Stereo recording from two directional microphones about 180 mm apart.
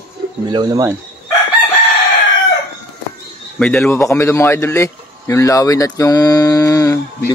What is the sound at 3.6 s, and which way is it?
A man's voice, 5° left (ahead or behind).